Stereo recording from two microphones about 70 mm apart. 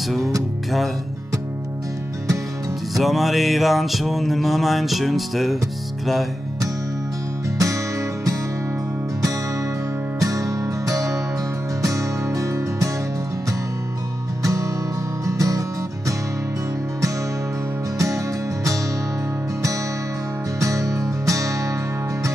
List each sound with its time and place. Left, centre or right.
3.0 s mantra: centre
7.5 s music: right
10.2 s music: right
14.4 s music: right
17.9 s music: right
20.5 s music: right